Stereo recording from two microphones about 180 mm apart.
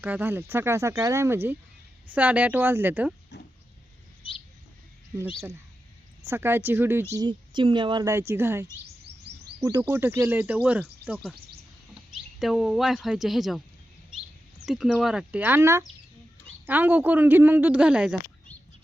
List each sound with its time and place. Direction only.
0.0 s speech: 10° right (ahead or behind)
4.2 s a sound: 30° left (ahead or behind)
6.2 s speech: 15° right (ahead or behind)
7.1 s a woman's voice: 25° right (ahead or behind); by 11.3 s 5° right (ahead or behind)
12.4 s speech: 5° right (ahead or behind)
14.7 s speech: centre (ahead or behind)